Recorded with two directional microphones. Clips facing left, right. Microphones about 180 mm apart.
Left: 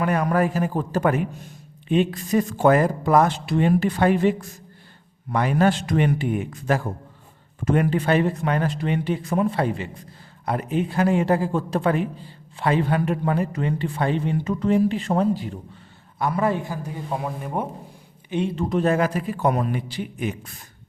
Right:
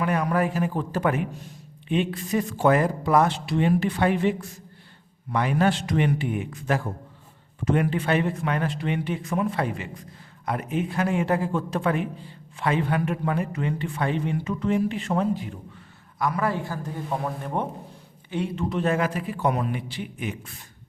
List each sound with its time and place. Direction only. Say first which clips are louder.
0.0 s a man's voice: left 3 dB; 45° left (ahead or behind); by 17.7 s 10° left (ahead or behind)
18.3 s a man's voice: left 4 dB; 20° left (ahead or behind)
18.5 s speech: left 3 dB; 40° left (ahead or behind)